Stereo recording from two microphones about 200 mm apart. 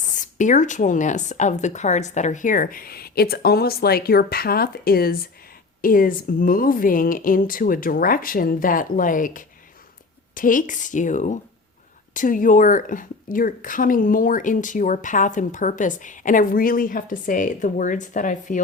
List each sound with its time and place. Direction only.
0.2 s a woman's voice: 40° left (ahead or behind)